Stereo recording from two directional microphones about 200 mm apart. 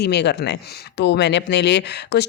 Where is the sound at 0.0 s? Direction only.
55° left (ahead or behind).